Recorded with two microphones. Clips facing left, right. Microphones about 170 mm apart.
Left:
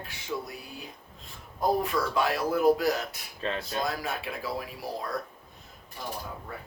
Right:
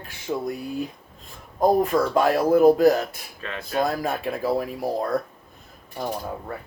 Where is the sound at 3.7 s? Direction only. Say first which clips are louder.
Right 7 dB; 50° right (ahead or behind).